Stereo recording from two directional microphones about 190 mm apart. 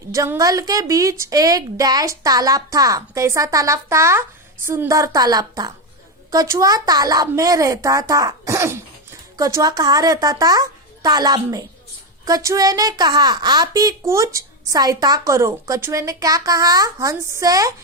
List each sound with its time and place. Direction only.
0.1 s a woman's voice: 15° right (ahead or behind)